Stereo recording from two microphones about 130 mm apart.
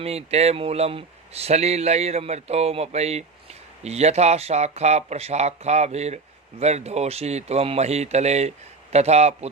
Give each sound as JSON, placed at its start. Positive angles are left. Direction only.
{"t": 0.0, "sound": "speech", "side_deg": -50}